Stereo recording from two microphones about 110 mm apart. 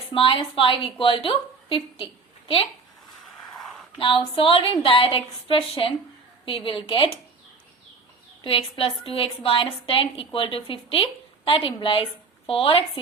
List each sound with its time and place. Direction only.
0.1 s a woman's voice: 55° left (ahead or behind)
3.9 s a woman's voice: 50° left (ahead or behind)
8.4 s a woman's voice: 60° left (ahead or behind)